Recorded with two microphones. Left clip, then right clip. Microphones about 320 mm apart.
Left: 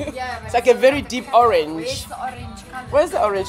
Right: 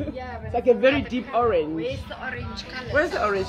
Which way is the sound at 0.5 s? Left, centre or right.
Left.